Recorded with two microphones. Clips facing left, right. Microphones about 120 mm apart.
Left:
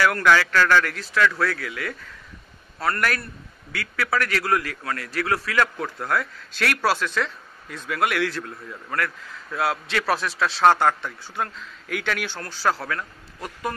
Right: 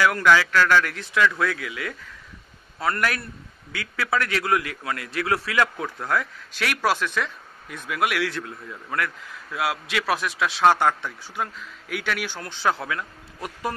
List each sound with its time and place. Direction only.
0.0 s a man's voice: 15° right (ahead or behind)
6.0 s speech: 15° right (ahead or behind)
13.4 s a man's voice: 25° right (ahead or behind)